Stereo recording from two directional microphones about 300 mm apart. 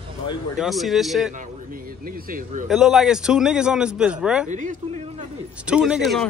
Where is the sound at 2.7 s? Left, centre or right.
Centre.